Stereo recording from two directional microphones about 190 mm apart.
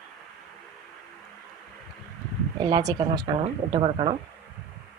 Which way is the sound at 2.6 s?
25° right (ahead or behind).